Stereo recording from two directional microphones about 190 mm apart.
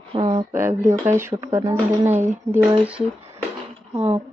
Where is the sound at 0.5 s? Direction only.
15° right (ahead or behind).